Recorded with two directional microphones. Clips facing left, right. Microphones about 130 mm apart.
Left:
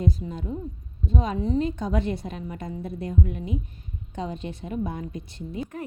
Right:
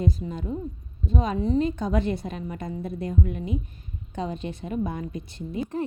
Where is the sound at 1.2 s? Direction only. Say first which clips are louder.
Right 2 dB; 50° right (ahead or behind).